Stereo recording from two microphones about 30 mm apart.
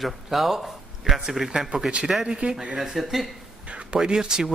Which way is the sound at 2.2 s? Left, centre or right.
Right.